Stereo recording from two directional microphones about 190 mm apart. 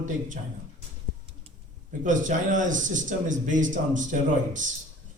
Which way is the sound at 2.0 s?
40° right (ahead or behind).